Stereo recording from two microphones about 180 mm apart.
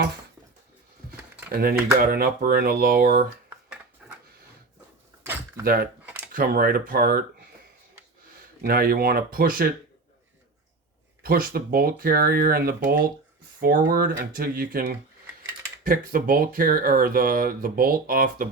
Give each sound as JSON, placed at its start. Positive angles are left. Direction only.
{"t": 2.0, "sound": "speech", "side_deg": -55}
{"t": 5.2, "sound": "door", "side_deg": -15}
{"t": 5.6, "sound": "speech", "side_deg": -55}
{"t": 8.6, "sound": "speech", "side_deg": -55}
{"t": 11.2, "sound": "speech", "side_deg": -55}